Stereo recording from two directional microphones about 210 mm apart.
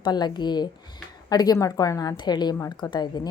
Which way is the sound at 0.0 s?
20° left (ahead or behind).